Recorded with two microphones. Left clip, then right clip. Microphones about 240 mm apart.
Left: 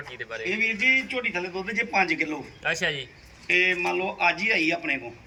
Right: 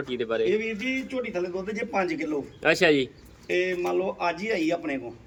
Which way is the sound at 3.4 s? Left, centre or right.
Centre.